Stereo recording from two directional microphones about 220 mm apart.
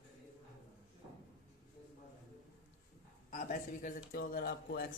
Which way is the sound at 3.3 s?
35° left (ahead or behind).